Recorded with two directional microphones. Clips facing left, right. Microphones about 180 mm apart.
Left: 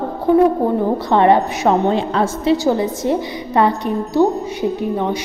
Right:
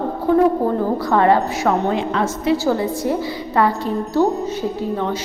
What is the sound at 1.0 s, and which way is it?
A woman's voice, 20° left (ahead or behind).